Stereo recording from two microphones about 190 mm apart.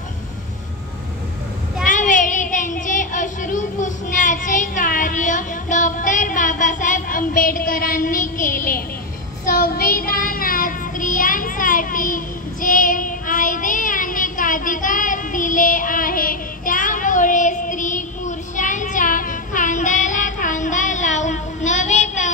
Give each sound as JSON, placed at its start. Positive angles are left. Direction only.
{"t": 1.9, "sound": "child singing", "side_deg": 45}